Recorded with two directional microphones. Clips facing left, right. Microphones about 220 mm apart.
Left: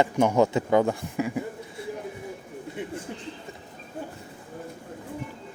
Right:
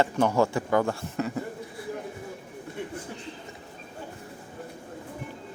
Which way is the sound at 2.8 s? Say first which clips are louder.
Left 1 dB; 15° left (ahead or behind).